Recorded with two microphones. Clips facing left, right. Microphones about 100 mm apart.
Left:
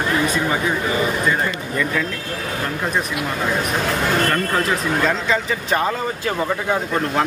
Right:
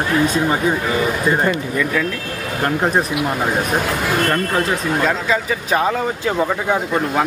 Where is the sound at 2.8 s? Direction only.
40° right (ahead or behind).